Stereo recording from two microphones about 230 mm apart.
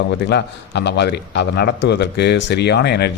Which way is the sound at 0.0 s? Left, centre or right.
Left.